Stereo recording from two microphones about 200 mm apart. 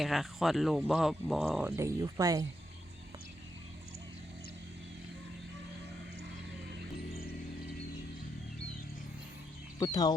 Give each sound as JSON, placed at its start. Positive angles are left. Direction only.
{"t": 0.0, "sound": "speech", "side_deg": 0}
{"t": 1.7, "sound": "speech", "side_deg": -15}
{"t": 9.7, "sound": "speech", "side_deg": 20}